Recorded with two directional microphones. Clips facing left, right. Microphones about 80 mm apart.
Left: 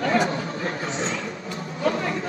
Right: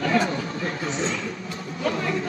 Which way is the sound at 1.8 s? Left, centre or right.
Left.